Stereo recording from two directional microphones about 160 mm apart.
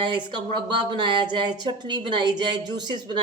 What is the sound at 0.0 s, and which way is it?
Speech, 30° right (ahead or behind).